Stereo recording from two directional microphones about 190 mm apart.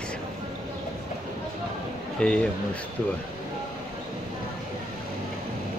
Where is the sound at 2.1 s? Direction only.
5° left (ahead or behind).